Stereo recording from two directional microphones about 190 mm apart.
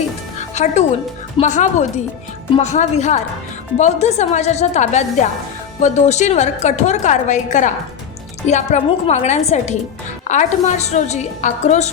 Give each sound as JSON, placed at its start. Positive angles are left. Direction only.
{"t": 0.3, "sound": "music", "side_deg": 40}
{"t": 1.4, "sound": "a woman's voice", "side_deg": 40}